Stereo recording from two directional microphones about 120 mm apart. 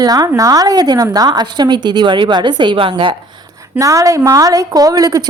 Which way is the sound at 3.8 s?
25° right (ahead or behind).